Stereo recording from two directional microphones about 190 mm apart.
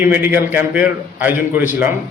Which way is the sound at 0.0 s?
10° right (ahead or behind).